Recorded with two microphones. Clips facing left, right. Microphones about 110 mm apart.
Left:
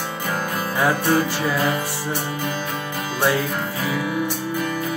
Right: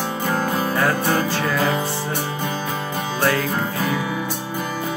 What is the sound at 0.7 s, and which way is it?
Music, 15° left (ahead or behind).